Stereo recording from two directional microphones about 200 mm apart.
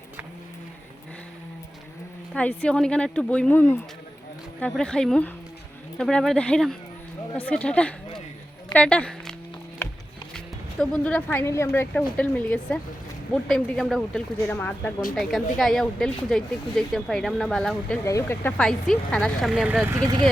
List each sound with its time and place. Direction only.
2.3 s speech: 5° left (ahead or behind)
10.3 s speech: 5° left (ahead or behind)